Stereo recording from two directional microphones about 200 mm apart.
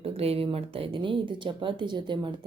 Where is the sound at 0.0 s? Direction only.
30° right (ahead or behind).